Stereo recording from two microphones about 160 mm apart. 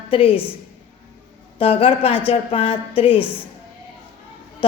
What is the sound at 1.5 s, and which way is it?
A woman's voice, 35° left (ahead or behind).